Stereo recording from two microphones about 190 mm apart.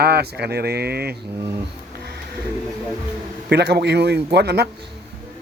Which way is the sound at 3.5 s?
60° right (ahead or behind).